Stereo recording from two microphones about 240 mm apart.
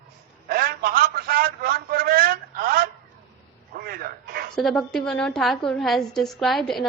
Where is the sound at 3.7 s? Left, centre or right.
Right.